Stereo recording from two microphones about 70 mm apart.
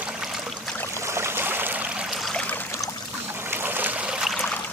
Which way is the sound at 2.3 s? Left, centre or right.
Left.